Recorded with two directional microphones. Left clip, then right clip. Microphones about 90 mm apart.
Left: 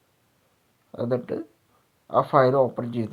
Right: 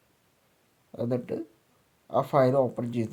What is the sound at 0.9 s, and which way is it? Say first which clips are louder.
Speech: left 4 dB; 20° left (ahead or behind).